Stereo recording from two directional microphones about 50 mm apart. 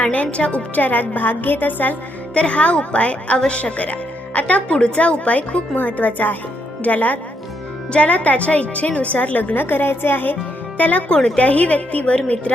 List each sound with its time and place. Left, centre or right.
0.0 s a woman's voice: left
0.8 s a woman's voice: left
2.3 s a woman's voice: left
10.8 s a woman's voice: left